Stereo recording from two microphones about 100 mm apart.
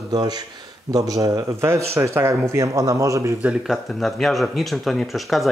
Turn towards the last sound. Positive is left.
turn(degrees=0)  # may be behind; listen again after turning